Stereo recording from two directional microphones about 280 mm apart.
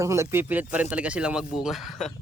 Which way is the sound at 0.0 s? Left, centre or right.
Centre.